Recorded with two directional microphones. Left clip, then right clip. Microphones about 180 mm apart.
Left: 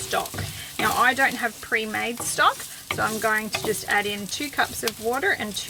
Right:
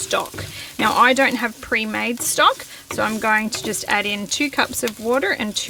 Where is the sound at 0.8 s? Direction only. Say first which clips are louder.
Right 5 dB; 55° right (ahead or behind).